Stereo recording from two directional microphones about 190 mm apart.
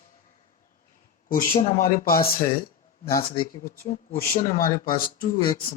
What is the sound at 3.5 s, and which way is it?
Speech, 45° left (ahead or behind).